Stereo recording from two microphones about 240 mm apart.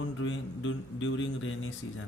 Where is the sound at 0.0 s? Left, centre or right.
Left.